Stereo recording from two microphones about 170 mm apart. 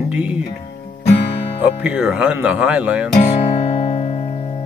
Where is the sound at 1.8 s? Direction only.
5° right (ahead or behind).